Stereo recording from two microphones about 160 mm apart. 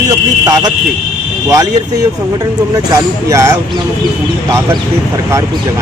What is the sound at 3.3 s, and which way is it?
Speech, 20° right (ahead or behind).